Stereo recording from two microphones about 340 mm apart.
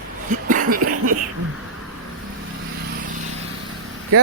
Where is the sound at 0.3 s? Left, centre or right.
Right.